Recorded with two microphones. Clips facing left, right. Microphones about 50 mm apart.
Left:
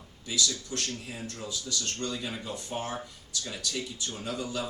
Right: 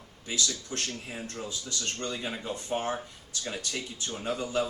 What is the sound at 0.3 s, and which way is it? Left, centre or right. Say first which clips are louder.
Speech: left 1 dB; right.